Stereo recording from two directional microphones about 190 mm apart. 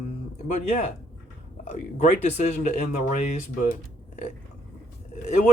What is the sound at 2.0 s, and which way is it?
Speech, 35° left (ahead or behind).